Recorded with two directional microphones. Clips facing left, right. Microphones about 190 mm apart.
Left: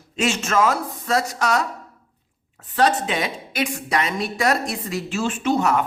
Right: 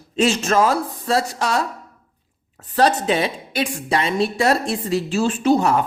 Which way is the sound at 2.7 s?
35° right (ahead or behind).